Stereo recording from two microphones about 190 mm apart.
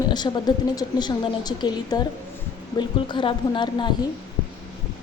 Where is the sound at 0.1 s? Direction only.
20° left (ahead or behind).